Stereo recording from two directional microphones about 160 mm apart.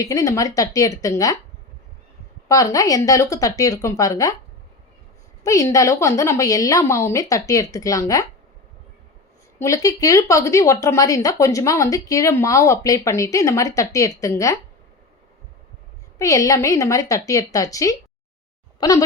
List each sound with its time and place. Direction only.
0.0 s speech: 20° left (ahead or behind)
2.5 s speech: 20° left (ahead or behind)
5.4 s speech: 20° left (ahead or behind)
9.6 s speech: 20° left (ahead or behind)
16.1 s speech: 20° left (ahead or behind)